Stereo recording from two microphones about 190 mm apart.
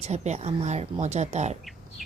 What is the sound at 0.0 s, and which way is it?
Speech, 35° right (ahead or behind).